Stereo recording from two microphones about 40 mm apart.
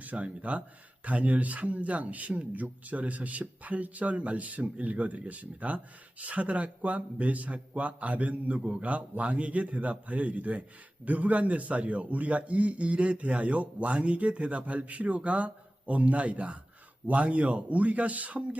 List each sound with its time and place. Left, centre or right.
0.0 s speech: right